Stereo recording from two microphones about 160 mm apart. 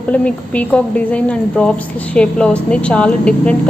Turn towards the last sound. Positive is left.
turn(degrees=5)  # may be behind; listen again after turning